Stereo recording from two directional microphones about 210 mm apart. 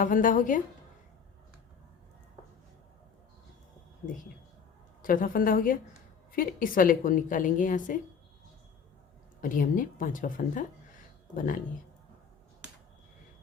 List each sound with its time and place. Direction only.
0.0 s a woman's voice: 40° left (ahead or behind)
5.0 s a woman's voice: 40° left (ahead or behind)
9.4 s a woman's voice: 40° left (ahead or behind)